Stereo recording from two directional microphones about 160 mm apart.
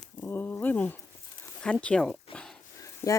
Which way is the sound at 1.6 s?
5° left (ahead or behind).